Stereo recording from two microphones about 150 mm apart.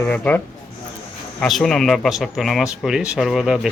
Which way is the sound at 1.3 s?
Centre (ahead or behind).